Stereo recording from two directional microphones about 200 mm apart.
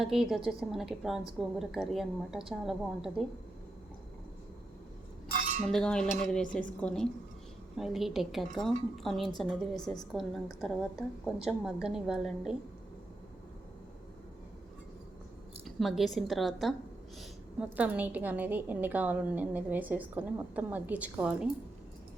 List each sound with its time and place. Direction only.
0.0 s a woman's voice: centre (ahead or behind)
5.4 s cutlery: 40° right (ahead or behind)
5.6 s a woman's voice: 5° left (ahead or behind)
15.6 s a woman's voice: centre (ahead or behind)